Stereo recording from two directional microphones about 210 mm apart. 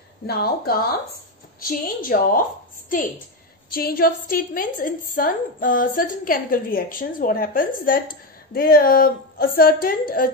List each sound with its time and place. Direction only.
0.3 s a woman's voice: 45° left (ahead or behind)
3.7 s a woman's voice: 45° left (ahead or behind)